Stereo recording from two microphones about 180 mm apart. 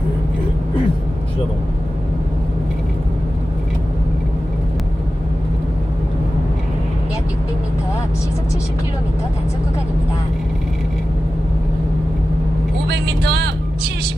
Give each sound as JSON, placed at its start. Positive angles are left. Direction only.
{"t": 12.9, "sound": "vehicle", "side_deg": -70}